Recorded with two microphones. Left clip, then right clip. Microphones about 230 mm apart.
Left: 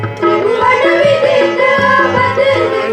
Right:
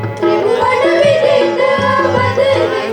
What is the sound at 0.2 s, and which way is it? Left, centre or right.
Music, left.